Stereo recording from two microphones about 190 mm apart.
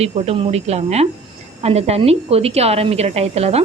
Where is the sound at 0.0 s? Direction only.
35° right (ahead or behind).